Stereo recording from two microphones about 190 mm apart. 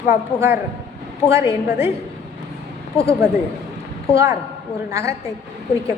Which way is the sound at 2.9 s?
35° left (ahead or behind).